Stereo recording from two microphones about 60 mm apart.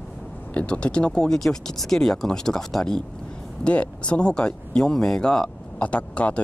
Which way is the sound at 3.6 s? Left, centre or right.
Centre.